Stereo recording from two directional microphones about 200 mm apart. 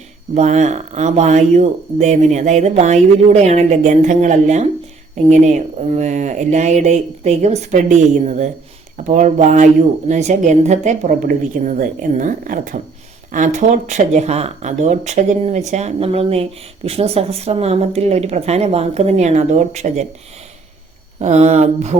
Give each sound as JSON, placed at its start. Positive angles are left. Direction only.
{"t": 0.3, "sound": "speech", "side_deg": -35}
{"t": 21.2, "sound": "speech", "side_deg": -35}